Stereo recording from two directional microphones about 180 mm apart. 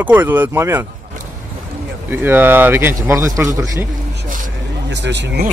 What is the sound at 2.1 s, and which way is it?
Speech, 10° right (ahead or behind).